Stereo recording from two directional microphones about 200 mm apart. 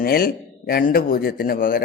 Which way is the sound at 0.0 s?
50° left (ahead or behind).